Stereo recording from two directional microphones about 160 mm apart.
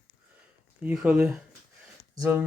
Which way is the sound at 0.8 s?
10° right (ahead or behind).